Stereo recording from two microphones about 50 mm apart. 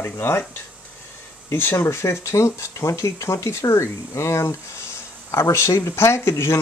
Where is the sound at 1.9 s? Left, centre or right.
Left.